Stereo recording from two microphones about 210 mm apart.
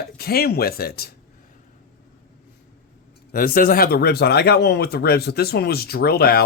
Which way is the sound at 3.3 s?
40° left (ahead or behind).